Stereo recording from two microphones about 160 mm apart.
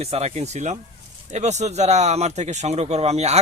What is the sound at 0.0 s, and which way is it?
Speech, 40° right (ahead or behind).